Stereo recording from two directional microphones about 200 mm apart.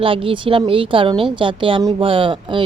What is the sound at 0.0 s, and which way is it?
A woman's voice, 25° right (ahead or behind).